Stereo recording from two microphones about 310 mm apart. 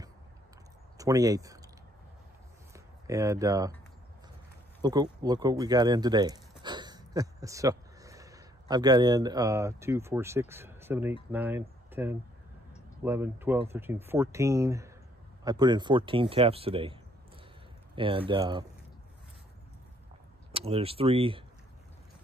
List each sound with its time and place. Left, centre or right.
0.9 s speech: centre
2.7 s speech: centre
4.8 s speech: centre
6.6 s a sound: centre
10.5 s speech: centre
20.5 s speech: centre